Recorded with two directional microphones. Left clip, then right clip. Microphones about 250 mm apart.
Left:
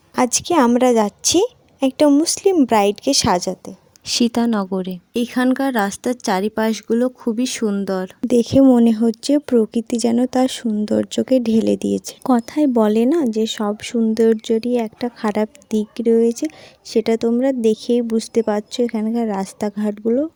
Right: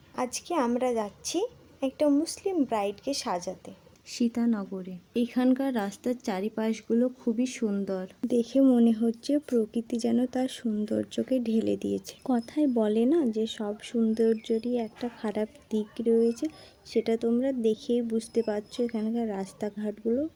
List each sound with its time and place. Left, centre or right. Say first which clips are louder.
0.2 s speech: left 13 dB; left